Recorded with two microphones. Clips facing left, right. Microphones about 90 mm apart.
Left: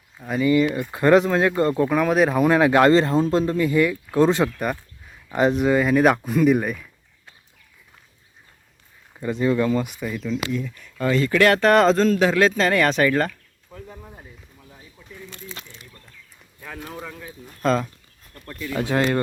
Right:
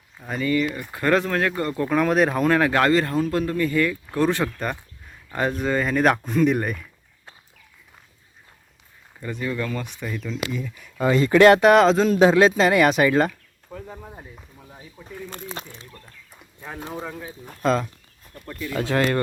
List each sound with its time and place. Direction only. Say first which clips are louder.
0.2 s speech: left 5 dB; 5° left (ahead or behind)
0.5 s speech: left 3 dB; 20° left (ahead or behind)
1.9 s speech: left 1 dB; centre (ahead or behind)
2.5 s speech: left 3 dB; 15° left (ahead or behind)
4.6 s a sound: left 3 dB; 5° left (ahead or behind)
5.4 s speech: left 5 dB; 15° left (ahead or behind)
9.2 s speech: left 7 dB; 25° left (ahead or behind); by 11.6 s 25° right (ahead or behind)
11.6 s speech: right 1 dB; centre (ahead or behind)
12.0 s speech: right 2 dB; 20° right (ahead or behind)
13.7 s speech: right 3 dB; 40° right (ahead or behind)
14.9 s a sound: right 6 dB; 45° right (ahead or behind)
16.6 s speech: right 2 dB; 20° right (ahead or behind)
17.6 s speech: even; centre (ahead or behind)
18.8 s speech: even; 15° left (ahead or behind)